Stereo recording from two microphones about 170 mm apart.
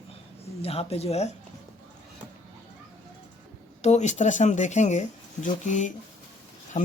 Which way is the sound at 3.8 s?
40° left (ahead or behind).